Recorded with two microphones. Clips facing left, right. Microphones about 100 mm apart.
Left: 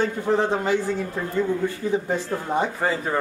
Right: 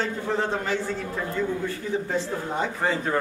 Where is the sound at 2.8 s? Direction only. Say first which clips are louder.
Right 2 dB; 5° left (ahead or behind).